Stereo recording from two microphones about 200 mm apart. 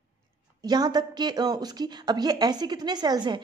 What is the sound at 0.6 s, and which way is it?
A woman's voice, 20° right (ahead or behind).